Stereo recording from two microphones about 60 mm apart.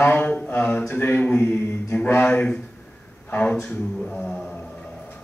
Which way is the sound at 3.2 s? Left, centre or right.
Left.